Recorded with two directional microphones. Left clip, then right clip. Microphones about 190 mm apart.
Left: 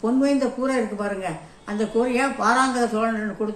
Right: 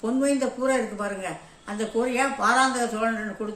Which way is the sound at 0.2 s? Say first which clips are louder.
Even; 15° right (ahead or behind).